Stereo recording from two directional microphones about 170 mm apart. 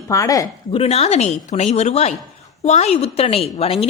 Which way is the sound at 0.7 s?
35° left (ahead or behind).